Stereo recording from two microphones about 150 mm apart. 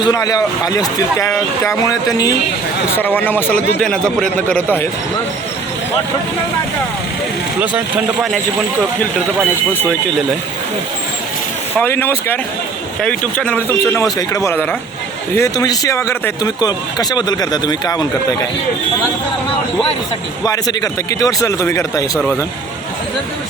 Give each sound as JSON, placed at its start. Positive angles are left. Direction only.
{"t": 0.0, "sound": "speech", "side_deg": 25}
{"t": 3.0, "sound": "a man's voice", "side_deg": 10}
{"t": 11.8, "sound": "a man's voice", "side_deg": 15}
{"t": 14.0, "sound": "speech", "side_deg": 20}
{"t": 15.4, "sound": "speech", "side_deg": 25}
{"t": 20.4, "sound": "speech", "side_deg": 25}